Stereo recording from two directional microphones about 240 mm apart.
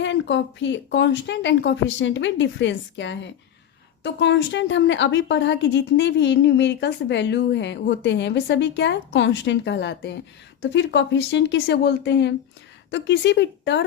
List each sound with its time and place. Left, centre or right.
0.0 s a woman's voice: left